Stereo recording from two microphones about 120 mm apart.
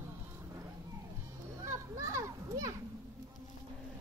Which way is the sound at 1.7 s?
25° right (ahead or behind).